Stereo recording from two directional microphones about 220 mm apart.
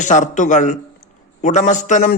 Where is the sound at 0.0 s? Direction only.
35° left (ahead or behind).